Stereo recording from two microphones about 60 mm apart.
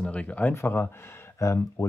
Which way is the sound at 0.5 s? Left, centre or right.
Left.